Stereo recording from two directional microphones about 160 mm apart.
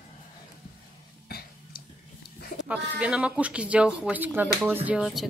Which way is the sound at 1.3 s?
70° left (ahead or behind).